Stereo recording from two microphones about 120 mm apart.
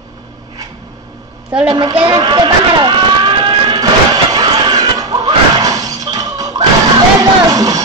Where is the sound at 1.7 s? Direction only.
40° right (ahead or behind).